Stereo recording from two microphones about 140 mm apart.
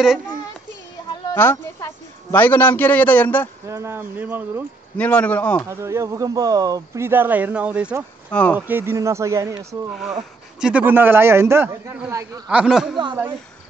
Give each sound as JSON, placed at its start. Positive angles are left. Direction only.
{"t": 1.3, "sound": "a man's voice", "side_deg": 15}
{"t": 3.6, "sound": "a man's voice", "side_deg": -20}
{"t": 4.9, "sound": "speech", "side_deg": 10}
{"t": 5.7, "sound": "speech", "side_deg": -20}
{"t": 7.1, "sound": "a man's voice", "side_deg": -15}
{"t": 8.3, "sound": "speech", "side_deg": 10}
{"t": 8.5, "sound": "speech", "side_deg": -15}
{"t": 9.8, "sound": "a man's voice", "side_deg": 0}
{"t": 12.4, "sound": "speech", "side_deg": -5}